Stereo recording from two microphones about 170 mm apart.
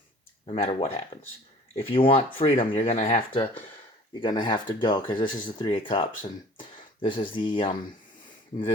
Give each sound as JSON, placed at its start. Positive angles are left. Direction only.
{"t": 0.4, "sound": "speech", "side_deg": 35}